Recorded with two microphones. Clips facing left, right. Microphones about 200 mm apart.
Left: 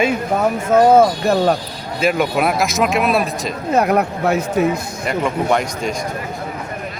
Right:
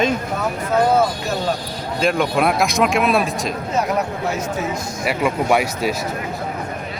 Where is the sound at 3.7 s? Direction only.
60° left (ahead or behind).